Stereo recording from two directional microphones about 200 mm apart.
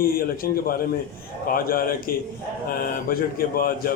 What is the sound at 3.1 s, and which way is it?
Speech, 45° left (ahead or behind).